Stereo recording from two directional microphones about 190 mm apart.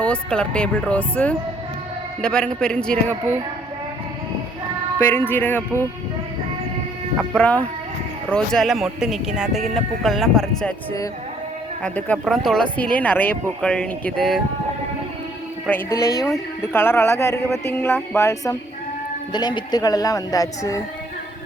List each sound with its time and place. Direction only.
0.0 s speech: 5° left (ahead or behind)
4.9 s speech: 10° left (ahead or behind)
7.2 s speech: 5° left (ahead or behind)
11.8 s speech: 5° left (ahead or behind)
15.6 s speech: 10° left (ahead or behind)